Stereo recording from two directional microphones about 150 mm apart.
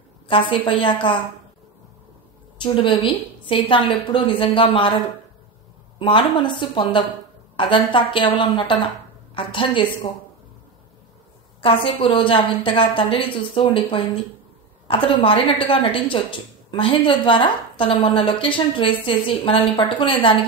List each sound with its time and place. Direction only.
0.3 s a woman's voice: 35° left (ahead or behind)
2.6 s a woman's voice: 35° left (ahead or behind)
5.9 s a woman's voice: 35° left (ahead or behind)
11.6 s a woman's voice: 35° left (ahead or behind)